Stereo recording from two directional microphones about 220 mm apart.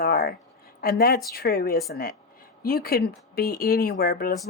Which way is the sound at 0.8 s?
45° left (ahead or behind).